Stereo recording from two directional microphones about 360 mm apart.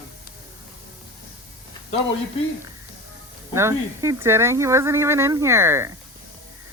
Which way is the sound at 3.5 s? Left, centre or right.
Centre.